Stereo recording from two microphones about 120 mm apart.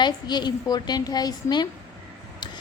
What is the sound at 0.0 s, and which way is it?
A woman's voice, 35° left (ahead or behind).